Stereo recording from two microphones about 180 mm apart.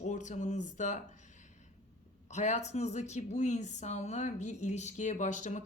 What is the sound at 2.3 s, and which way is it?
Speech, 40° left (ahead or behind).